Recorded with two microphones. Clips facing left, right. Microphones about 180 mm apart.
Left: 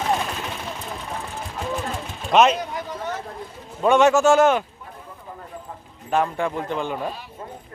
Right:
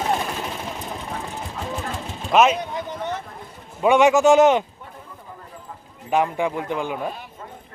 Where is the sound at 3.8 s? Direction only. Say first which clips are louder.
Right 1 dB; 15° right (ahead or behind).